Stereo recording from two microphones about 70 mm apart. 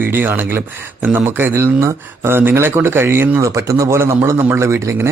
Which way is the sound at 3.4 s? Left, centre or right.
Right.